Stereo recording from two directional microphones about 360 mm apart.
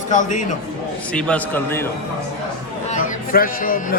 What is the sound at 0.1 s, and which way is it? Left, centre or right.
Speech, left.